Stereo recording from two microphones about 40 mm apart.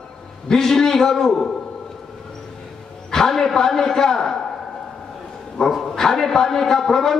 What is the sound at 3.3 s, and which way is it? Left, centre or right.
A man's voice, centre.